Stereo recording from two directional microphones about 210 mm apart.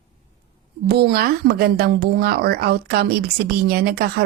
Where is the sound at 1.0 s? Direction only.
50° right (ahead or behind).